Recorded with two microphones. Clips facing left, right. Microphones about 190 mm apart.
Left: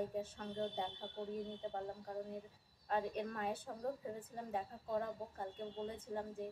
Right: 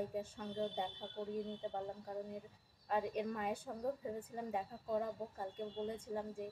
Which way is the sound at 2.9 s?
5° right (ahead or behind).